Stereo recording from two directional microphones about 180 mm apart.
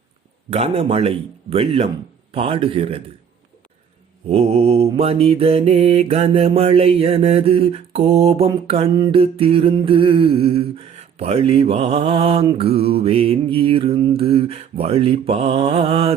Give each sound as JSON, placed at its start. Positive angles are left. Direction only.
{"t": 0.5, "sound": "mantra", "side_deg": -35}
{"t": 4.3, "sound": "mantra", "side_deg": -35}